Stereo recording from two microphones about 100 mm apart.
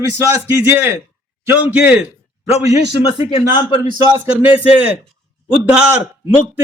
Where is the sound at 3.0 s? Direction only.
70° left (ahead or behind).